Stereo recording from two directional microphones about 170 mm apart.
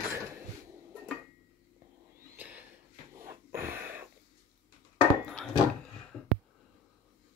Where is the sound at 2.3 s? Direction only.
10° right (ahead or behind).